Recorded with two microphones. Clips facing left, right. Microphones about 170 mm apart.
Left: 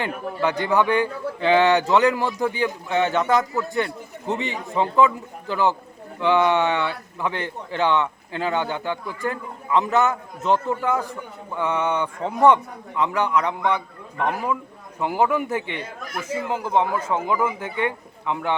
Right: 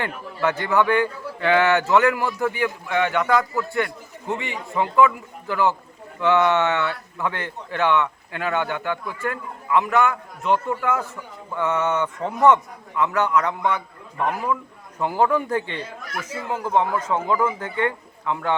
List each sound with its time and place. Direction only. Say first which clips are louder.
0.0 s a man's voice: even; 15° left (ahead or behind)